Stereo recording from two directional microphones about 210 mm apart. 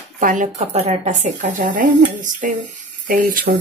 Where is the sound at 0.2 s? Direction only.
40° right (ahead or behind).